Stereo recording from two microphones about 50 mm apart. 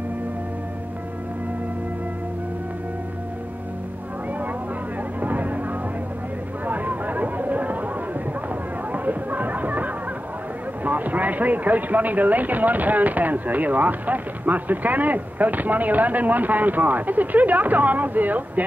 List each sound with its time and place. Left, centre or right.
5.2 s music: right
6.6 s a sound: right
8.9 s chatter: right
10.8 s speech: right